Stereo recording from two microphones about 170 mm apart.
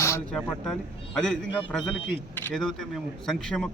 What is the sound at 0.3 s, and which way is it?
Speech, 5° left (ahead or behind).